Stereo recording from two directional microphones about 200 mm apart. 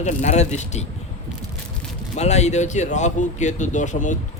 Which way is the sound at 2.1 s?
35° left (ahead or behind).